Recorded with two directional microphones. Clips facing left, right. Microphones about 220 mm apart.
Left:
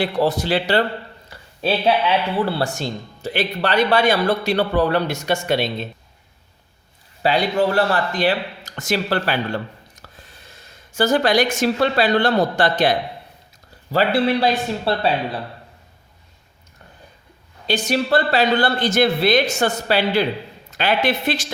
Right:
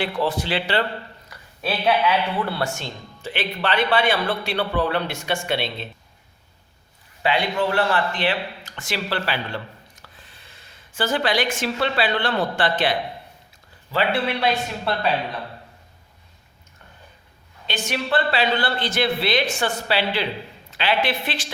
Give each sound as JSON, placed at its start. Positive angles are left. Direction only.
{"t": 0.0, "sound": "speech", "side_deg": 40}
{"t": 1.3, "sound": "speech", "side_deg": 25}
{"t": 7.2, "sound": "a woman's voice", "side_deg": 35}
{"t": 17.7, "sound": "a woman's voice", "side_deg": 40}